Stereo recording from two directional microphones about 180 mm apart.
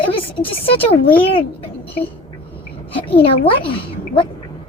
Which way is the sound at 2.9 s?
30° left (ahead or behind).